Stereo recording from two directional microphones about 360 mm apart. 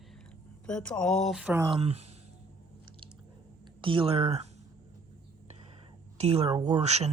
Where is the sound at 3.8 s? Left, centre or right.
Centre.